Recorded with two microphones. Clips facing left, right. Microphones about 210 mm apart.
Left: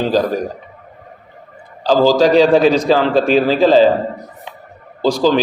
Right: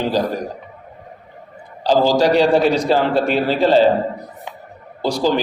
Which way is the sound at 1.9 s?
90° left.